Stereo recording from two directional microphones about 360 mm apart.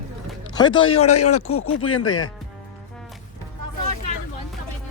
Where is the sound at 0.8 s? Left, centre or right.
Left.